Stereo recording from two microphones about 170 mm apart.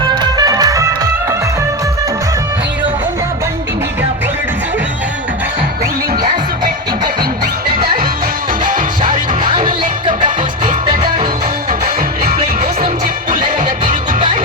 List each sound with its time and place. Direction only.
0.2 s music: 20° right (ahead or behind)
8.6 s music: 50° right (ahead or behind)